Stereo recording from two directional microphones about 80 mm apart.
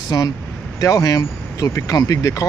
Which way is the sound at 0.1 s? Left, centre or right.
Left.